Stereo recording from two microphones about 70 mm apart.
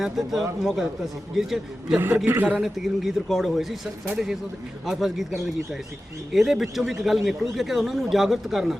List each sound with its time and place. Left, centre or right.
0.0 s a man's voice: centre
2.0 s a man's voice: right
2.6 s a man's voice: centre
4.9 s a man's voice: centre
6.3 s a man's voice: centre